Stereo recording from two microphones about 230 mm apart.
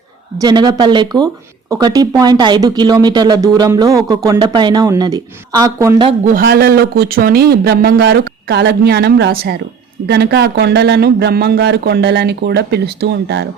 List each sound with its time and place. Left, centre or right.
0.4 s speech: centre
6.2 s a man's voice: right